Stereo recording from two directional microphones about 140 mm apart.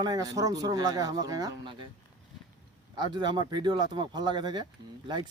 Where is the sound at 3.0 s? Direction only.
30° right (ahead or behind).